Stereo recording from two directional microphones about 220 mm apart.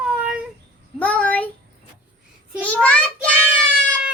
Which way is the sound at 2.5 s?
5° left (ahead or behind).